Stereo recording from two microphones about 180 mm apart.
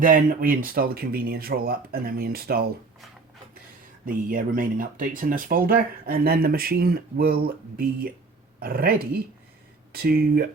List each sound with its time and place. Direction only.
0.0 s speech: 50° right (ahead or behind)
4.0 s speech: 50° right (ahead or behind)